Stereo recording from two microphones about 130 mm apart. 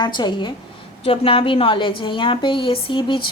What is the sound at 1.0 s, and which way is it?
A woman's voice, 45° left (ahead or behind).